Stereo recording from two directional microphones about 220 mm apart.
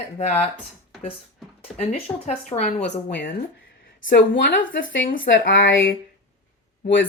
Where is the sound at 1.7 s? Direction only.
30° left (ahead or behind).